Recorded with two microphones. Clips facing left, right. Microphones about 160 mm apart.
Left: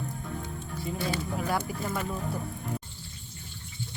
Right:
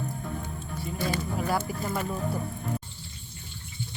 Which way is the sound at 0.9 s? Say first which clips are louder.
Right 2 dB; 45° right (ahead or behind).